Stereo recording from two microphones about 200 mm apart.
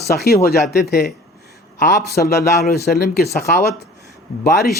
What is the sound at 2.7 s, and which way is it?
Speech, 50° left (ahead or behind).